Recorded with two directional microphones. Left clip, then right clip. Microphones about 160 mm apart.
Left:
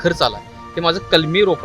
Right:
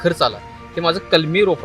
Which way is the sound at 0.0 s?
5° left (ahead or behind).